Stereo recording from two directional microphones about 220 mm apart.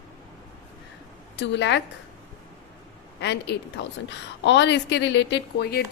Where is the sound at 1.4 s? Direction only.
55° left (ahead or behind).